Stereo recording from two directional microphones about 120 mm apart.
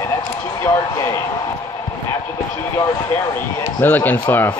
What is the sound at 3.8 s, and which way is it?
Speech, 15° left (ahead or behind).